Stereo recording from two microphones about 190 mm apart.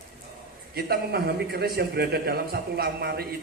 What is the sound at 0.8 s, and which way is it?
A man's voice, 55° right (ahead or behind).